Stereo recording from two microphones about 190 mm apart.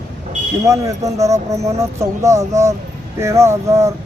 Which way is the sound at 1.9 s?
15° right (ahead or behind).